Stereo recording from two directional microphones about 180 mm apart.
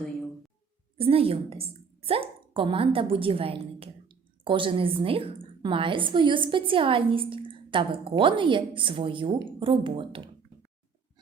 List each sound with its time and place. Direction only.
0.9 s a woman's voice: 30° right (ahead or behind)